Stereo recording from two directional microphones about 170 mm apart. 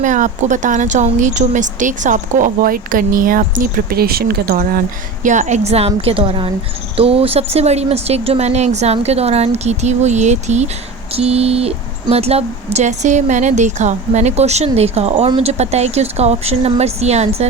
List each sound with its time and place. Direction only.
0.0 s speech: 45° right (ahead or behind)
5.2 s speech: 45° right (ahead or behind)